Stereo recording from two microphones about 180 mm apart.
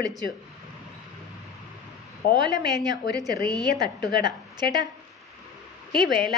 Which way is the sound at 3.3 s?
65° left (ahead or behind).